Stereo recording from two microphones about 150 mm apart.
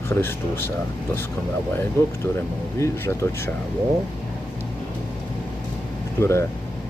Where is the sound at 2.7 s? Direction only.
20° left (ahead or behind).